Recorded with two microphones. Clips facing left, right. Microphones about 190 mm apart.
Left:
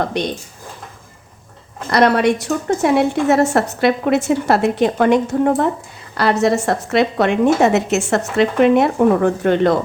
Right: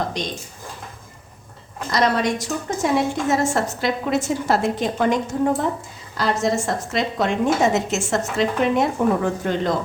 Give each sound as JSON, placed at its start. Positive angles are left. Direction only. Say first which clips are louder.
{"t": 0.0, "sound": "a woman's voice", "louder": "left 6 dB", "side_deg": 60}
{"t": 1.9, "sound": "a woman's voice", "louder": "left 6 dB", "side_deg": 60}